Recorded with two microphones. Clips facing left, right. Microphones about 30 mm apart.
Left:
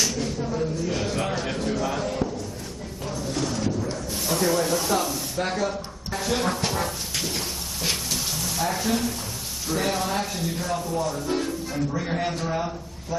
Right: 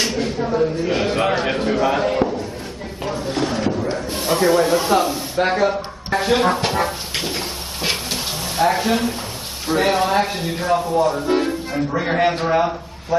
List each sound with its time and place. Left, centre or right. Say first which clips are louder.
0.0 s speech: right 5 dB; right
3.1 s a sound: right 6 dB; right
9.7 s speech: right 8 dB; right